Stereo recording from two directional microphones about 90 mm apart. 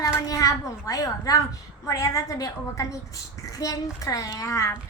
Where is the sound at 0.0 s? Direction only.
40° left (ahead or behind).